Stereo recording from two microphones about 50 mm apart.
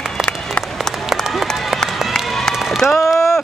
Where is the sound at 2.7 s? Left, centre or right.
Centre.